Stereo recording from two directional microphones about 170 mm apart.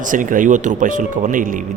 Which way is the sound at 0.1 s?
50° right (ahead or behind).